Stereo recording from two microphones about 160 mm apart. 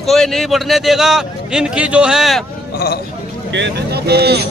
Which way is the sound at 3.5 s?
90° right.